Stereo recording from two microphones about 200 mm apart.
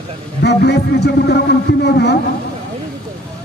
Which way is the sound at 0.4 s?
55° left (ahead or behind).